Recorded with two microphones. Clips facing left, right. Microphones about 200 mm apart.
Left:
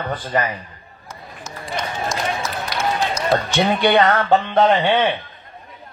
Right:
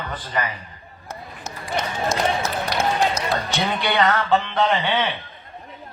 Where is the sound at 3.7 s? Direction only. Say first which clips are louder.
Left 5 dB; 50° left (ahead or behind).